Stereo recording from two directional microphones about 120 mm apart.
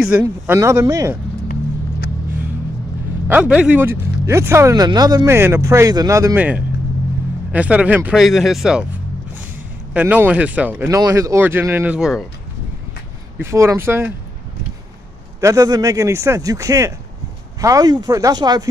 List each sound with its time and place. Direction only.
0.0 s speech: 15° right (ahead or behind)
3.3 s speech: 10° right (ahead or behind); by 5.3 s 30° right (ahead or behind)
5.3 s speech: 20° right (ahead or behind)
6.3 s speech: 10° right (ahead or behind)
8.2 s speech: centre (ahead or behind)
9.9 s speech: 15° right (ahead or behind)
10.9 s speech: 30° right (ahead or behind); by 12.3 s 5° right (ahead or behind)
13.4 s speech: 25° right (ahead or behind)
15.4 s speech: 25° right (ahead or behind)